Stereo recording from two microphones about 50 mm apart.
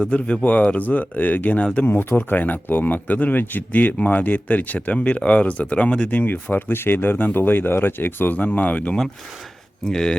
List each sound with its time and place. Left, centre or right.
0.0 s a man's voice: left
1.8 s a man's voice: left
6.1 s a man's voice: left
9.8 s speech: centre